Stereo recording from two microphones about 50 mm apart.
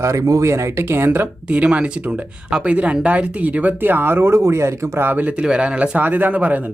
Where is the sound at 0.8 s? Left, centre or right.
Right.